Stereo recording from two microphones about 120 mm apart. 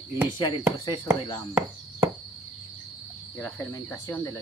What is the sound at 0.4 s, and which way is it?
Speech, 40° left (ahead or behind).